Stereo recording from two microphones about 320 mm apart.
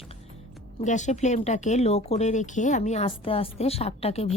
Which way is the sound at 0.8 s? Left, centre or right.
Left.